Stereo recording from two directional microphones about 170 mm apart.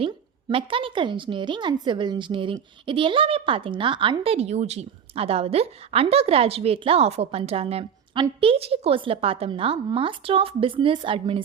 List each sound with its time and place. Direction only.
0.0 s a woman's voice: 30° right (ahead or behind)